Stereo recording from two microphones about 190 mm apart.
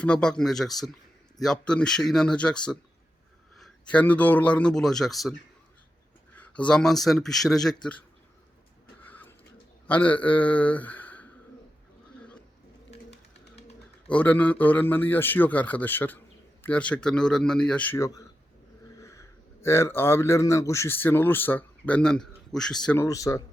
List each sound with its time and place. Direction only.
0.0 s speech: 5° left (ahead or behind)
6.3 s speech: 5° left (ahead or behind)
9.8 s a man's voice: 10° left (ahead or behind)
14.1 s a man's voice: 10° left (ahead or behind)
23.0 s a man's voice: 15° left (ahead or behind)